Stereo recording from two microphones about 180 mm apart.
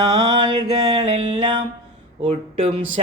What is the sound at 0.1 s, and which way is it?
Mantra, 25° right (ahead or behind).